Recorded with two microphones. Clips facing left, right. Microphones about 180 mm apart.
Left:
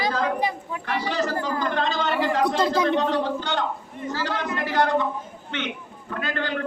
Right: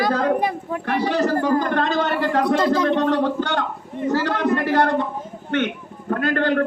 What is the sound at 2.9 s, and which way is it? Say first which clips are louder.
A man's voice: right 4 dB; 55° right (ahead or behind).